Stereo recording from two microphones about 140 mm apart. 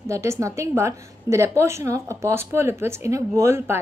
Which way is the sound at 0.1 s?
20° right (ahead or behind).